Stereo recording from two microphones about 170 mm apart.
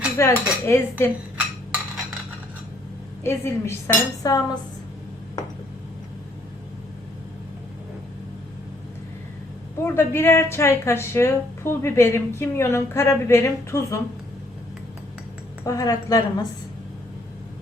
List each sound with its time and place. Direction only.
0.2 s a woman's voice: 15° left (ahead or behind)
3.2 s a woman's voice: 15° left (ahead or behind)
9.8 s a woman's voice: 15° left (ahead or behind)
15.6 s a woman's voice: 20° left (ahead or behind)